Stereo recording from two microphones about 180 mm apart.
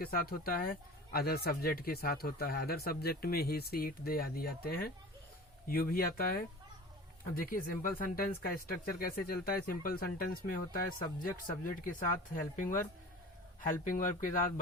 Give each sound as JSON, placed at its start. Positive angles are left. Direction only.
{"t": 0.0, "sound": "speech", "side_deg": 55}
{"t": 7.5, "sound": "speech", "side_deg": 50}
{"t": 13.8, "sound": "speech", "side_deg": 50}